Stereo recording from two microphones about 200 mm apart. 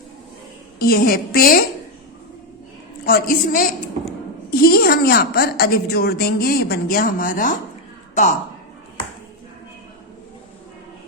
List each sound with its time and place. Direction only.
0.8 s a woman's voice: 50° left (ahead or behind)
3.1 s a woman's voice: 45° left (ahead or behind)